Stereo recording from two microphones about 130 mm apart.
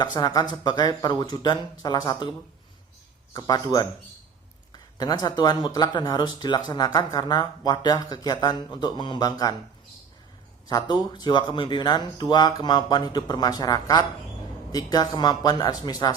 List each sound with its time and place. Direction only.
0.0 s speech: 30° left (ahead or behind)
3.3 s speech: 30° left (ahead or behind)
10.7 s speech: 30° left (ahead or behind)